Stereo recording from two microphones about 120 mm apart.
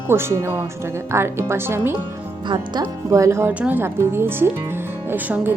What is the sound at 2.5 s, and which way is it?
Speech, 30° right (ahead or behind).